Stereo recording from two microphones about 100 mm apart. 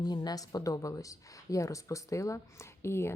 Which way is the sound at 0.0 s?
40° left (ahead or behind).